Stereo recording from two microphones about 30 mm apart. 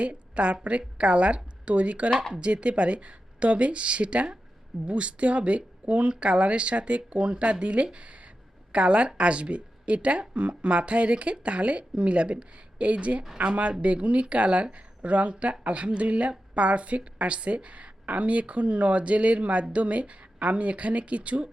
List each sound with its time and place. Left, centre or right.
0.0 s a woman's voice: right
7.9 s a sound: right
8.7 s speech: right
10.3 s speech: right